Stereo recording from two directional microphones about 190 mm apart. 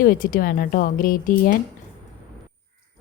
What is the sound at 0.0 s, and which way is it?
A woman's voice, 50° left (ahead or behind).